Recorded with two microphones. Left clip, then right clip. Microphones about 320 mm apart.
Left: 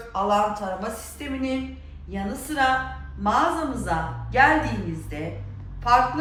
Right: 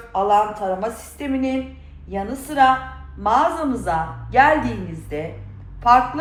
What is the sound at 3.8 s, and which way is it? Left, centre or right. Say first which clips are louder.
Speech: right 4 dB; centre.